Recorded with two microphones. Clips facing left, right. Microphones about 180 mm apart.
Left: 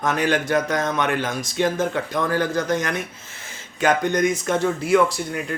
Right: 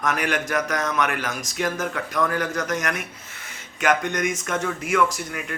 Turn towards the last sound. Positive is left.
turn(degrees=30)  # may be behind; listen again after turning